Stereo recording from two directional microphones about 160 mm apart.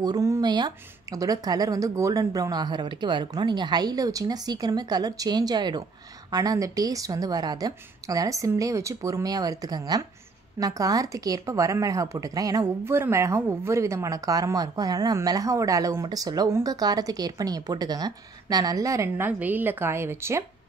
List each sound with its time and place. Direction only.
0.0 s a woman's voice: 20° right (ahead or behind)